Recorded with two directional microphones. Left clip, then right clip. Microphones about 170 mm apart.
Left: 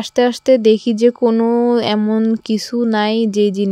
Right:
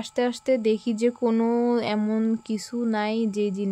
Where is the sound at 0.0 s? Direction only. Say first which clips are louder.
Left 11 dB; 40° left (ahead or behind).